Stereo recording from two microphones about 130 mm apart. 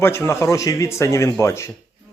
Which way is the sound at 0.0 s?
20° left (ahead or behind).